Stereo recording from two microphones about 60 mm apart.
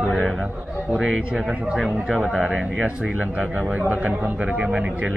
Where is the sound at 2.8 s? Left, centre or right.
Right.